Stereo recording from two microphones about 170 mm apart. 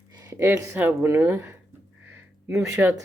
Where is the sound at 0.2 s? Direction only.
15° right (ahead or behind).